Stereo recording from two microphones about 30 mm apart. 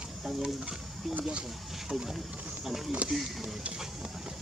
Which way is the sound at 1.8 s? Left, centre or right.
Centre.